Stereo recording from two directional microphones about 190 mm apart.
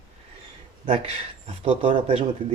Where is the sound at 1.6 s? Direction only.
30° right (ahead or behind).